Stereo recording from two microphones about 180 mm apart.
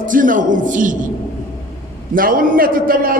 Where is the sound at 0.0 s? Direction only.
45° right (ahead or behind).